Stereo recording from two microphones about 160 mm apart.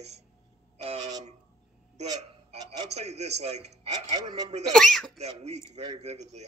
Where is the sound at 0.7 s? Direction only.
40° right (ahead or behind).